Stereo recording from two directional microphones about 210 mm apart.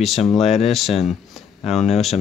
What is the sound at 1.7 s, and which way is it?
Speech, 30° left (ahead or behind).